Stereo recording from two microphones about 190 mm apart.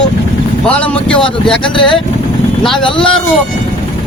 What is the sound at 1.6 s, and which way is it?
Speech, 25° left (ahead or behind).